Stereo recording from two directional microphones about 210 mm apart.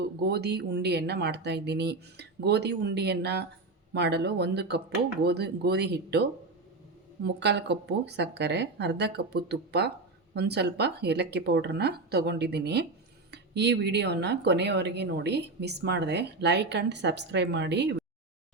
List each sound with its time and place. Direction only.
0.2 s speech: 50° right (ahead or behind)
7.3 s speech: 55° right (ahead or behind)